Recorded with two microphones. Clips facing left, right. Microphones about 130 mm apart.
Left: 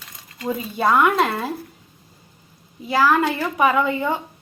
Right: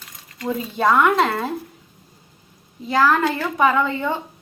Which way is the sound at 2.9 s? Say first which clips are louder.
Even; 10° left (ahead or behind).